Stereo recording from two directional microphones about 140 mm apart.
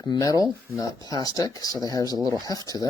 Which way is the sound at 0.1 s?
25° left (ahead or behind).